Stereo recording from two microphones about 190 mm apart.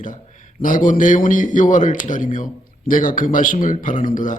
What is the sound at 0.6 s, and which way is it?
A man's voice, 45° left (ahead or behind).